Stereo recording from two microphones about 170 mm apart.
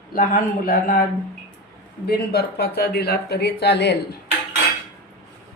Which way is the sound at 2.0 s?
65° left (ahead or behind).